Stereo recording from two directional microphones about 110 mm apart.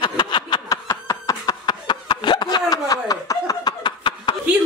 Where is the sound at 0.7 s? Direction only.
30° left (ahead or behind).